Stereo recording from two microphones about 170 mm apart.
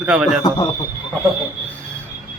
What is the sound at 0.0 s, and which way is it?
Speech, 5° right (ahead or behind).